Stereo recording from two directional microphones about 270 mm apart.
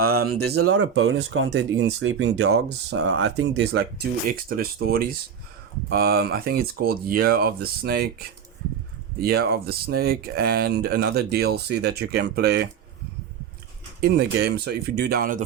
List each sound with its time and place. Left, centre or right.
0.0 s speech: right
0.8 s speech: right
3.2 s speech: right
9.2 s speech: right
14.2 s speech: right